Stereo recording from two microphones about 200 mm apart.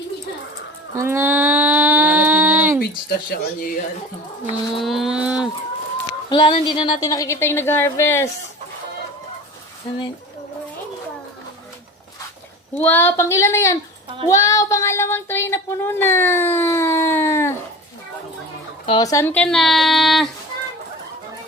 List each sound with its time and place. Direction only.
0.9 s a sound: 10° right (ahead or behind)
2.8 s speech: 45° left (ahead or behind)
4.6 s speech: centre (ahead or behind)
6.3 s speech: 25° left (ahead or behind)
12.7 s speech: 10° left (ahead or behind)
18.9 s speech: 20° left (ahead or behind); by 20.3 s centre (ahead or behind)